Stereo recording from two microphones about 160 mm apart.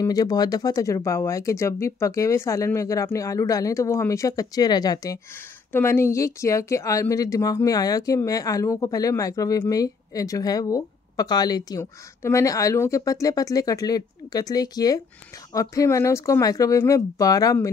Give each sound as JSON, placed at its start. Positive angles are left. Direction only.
{"t": 0.0, "sound": "speech", "side_deg": 25}